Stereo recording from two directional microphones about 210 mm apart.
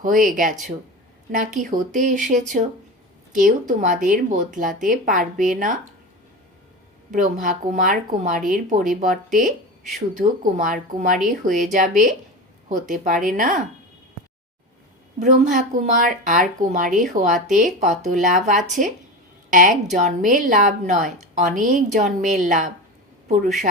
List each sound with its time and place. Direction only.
0.0 s speech: 40° right (ahead or behind)
1.6 s speech: 40° right (ahead or behind)
7.1 s speech: 40° right (ahead or behind)
15.2 s speech: 40° right (ahead or behind)